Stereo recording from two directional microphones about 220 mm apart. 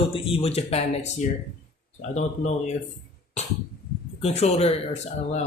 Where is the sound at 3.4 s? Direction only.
30° left (ahead or behind).